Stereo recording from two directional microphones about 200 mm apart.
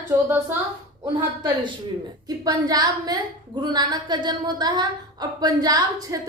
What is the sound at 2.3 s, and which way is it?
A woman's voice, 20° right (ahead or behind).